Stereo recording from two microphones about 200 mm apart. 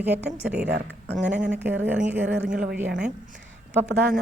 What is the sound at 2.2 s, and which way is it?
Speech, 60° right (ahead or behind).